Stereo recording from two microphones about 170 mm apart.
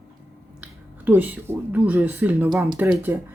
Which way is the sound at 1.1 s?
10° right (ahead or behind).